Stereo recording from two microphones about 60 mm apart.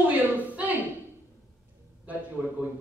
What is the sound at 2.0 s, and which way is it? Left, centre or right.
Speech, right.